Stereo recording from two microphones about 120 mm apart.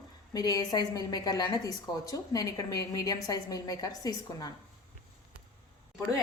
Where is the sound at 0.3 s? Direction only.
35° left (ahead or behind).